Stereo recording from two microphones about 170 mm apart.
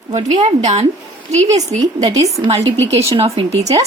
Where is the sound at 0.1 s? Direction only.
45° right (ahead or behind).